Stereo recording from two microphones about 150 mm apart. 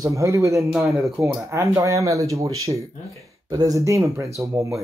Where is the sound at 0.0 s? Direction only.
20° right (ahead or behind).